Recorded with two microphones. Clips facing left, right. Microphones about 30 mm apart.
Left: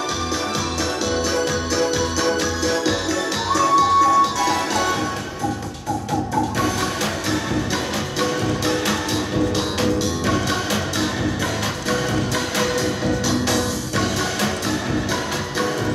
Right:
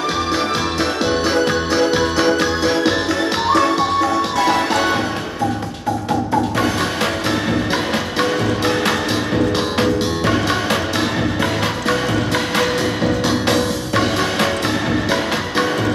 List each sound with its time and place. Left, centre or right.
1.3 s music: right
8.2 s music: right
13.5 s music: right